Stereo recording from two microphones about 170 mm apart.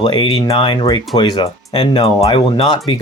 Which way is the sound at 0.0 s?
25° left (ahead or behind).